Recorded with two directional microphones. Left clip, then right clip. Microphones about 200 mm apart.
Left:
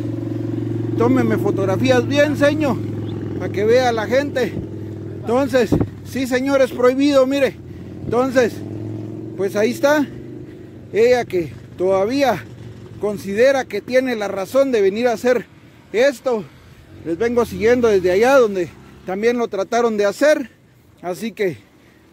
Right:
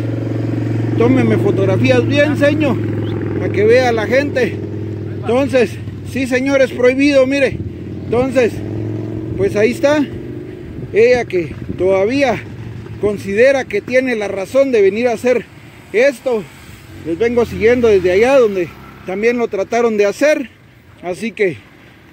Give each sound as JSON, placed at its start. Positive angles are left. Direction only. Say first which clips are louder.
{"t": 0.9, "sound": "speech", "louder": "right 4 dB", "side_deg": 20}
{"t": 2.9, "sound": "vehicle", "louder": "right 7 dB", "side_deg": 40}
{"t": 3.3, "sound": "speech", "louder": "right 4 dB", "side_deg": 20}